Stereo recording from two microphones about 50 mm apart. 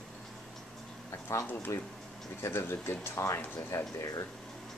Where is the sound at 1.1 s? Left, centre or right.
Left.